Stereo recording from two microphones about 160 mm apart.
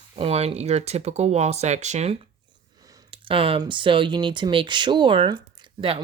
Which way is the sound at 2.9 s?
30° right (ahead or behind).